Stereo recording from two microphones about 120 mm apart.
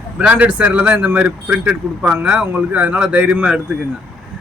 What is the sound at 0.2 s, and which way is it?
Speech, 10° right (ahead or behind).